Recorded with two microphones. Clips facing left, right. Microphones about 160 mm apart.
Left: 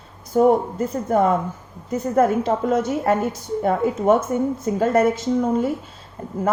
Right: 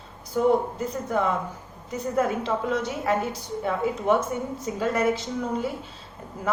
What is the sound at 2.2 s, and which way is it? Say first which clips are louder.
A woman's voice: left 7 dB; 50° left (ahead or behind).